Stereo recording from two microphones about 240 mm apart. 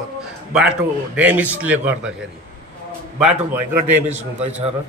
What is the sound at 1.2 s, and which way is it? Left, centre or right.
Speech, centre.